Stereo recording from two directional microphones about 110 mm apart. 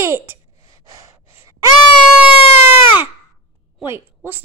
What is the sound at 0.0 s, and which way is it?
Child singing, 25° right (ahead or behind).